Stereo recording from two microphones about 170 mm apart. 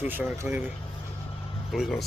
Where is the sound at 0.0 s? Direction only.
10° right (ahead or behind).